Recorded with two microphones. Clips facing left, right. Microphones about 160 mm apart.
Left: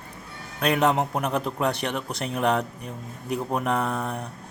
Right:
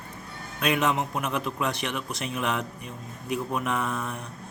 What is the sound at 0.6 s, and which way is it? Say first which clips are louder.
Speech: left 3 dB; 40° left (ahead or behind).